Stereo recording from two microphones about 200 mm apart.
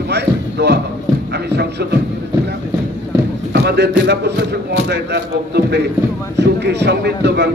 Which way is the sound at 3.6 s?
55° right (ahead or behind).